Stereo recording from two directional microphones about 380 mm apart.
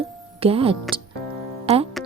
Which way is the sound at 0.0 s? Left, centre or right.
Centre.